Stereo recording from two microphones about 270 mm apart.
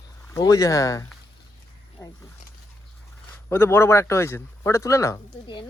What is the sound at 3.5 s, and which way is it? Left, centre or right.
Speech, centre.